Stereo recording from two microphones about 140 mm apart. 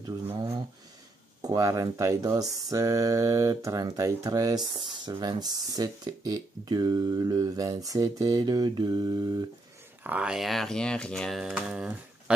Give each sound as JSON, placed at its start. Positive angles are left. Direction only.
{"t": 1.4, "sound": "speech", "side_deg": -25}
{"t": 10.0, "sound": "speech", "side_deg": -5}